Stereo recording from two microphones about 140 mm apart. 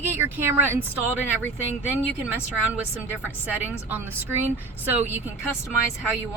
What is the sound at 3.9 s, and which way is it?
Speech, 15° right (ahead or behind).